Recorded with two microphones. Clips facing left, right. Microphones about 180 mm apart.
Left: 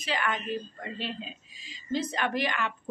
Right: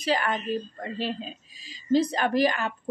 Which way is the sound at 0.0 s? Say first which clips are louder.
Right 5 dB; 35° right (ahead or behind).